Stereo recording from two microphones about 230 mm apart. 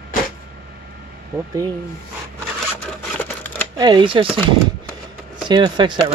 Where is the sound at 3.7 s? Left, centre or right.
Centre.